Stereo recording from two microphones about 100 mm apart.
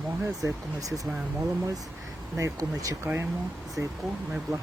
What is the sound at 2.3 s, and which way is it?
Speech, 35° right (ahead or behind).